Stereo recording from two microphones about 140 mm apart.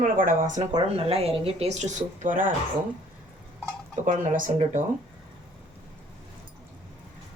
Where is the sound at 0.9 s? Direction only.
45° right (ahead or behind); by 2.5 s 70° right (ahead or behind).